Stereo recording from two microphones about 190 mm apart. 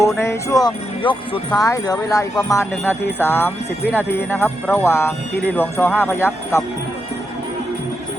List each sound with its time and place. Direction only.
0.2 s speech: 15° left (ahead or behind)